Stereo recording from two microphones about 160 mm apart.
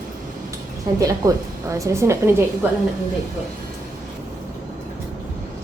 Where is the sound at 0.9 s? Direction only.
20° right (ahead or behind).